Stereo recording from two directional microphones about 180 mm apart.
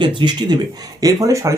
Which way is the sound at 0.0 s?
25° right (ahead or behind).